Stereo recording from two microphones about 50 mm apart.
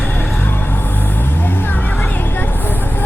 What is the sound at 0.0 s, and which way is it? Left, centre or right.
Music, left.